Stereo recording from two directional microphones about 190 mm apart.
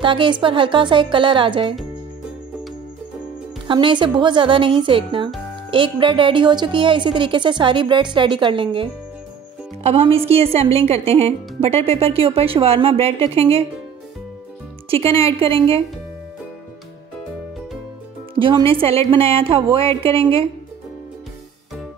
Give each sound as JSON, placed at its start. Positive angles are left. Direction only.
{"t": 0.0, "sound": "a woman's voice", "side_deg": -25}
{"t": 3.6, "sound": "a woman's voice", "side_deg": -25}
{"t": 9.8, "sound": "a woman's voice", "side_deg": -30}
{"t": 14.9, "sound": "a woman's voice", "side_deg": -30}
{"t": 18.3, "sound": "music", "side_deg": -25}
{"t": 18.7, "sound": "a woman's voice", "side_deg": -30}